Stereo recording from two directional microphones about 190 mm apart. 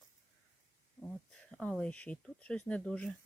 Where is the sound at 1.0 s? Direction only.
5° left (ahead or behind).